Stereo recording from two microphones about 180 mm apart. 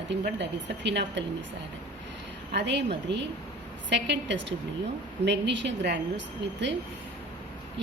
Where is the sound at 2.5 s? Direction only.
75° right (ahead or behind).